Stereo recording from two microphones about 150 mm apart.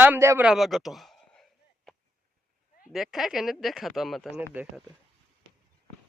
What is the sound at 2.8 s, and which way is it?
Speech, centre (ahead or behind).